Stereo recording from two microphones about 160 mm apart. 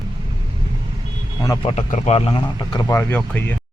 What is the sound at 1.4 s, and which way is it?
Speech, 25° left (ahead or behind).